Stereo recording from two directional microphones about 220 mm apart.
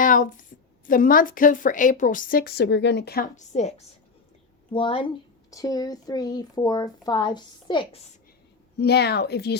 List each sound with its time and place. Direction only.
0.0 s a sound: 35° left (ahead or behind)
0.9 s a woman's voice: 40° left (ahead or behind); by 8.0 s 20° left (ahead or behind)
8.8 s a woman's voice: 50° left (ahead or behind)